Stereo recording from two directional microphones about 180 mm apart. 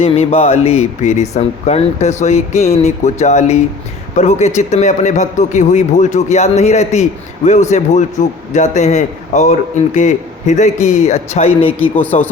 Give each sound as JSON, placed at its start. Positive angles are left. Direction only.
{"t": 0.0, "sound": "speech", "side_deg": 35}